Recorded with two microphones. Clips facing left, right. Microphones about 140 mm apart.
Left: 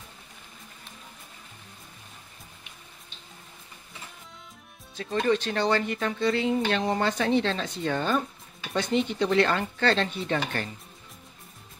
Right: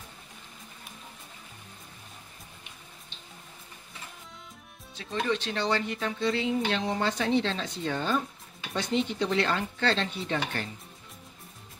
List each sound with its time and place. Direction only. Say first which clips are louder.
4.9 s speech: left 5 dB; 45° left (ahead or behind)